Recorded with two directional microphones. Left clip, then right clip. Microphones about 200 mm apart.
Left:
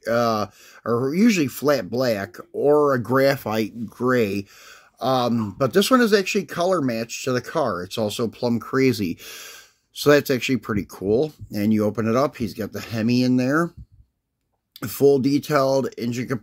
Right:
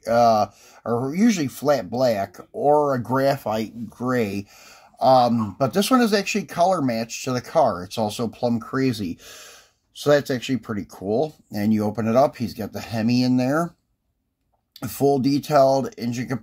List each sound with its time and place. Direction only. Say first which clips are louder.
0.0 s speech: right 4 dB; 25° left (ahead or behind)
4.1 s speech: left 3 dB; 25° left (ahead or behind)
14.8 s speech: left 3 dB; 25° left (ahead or behind)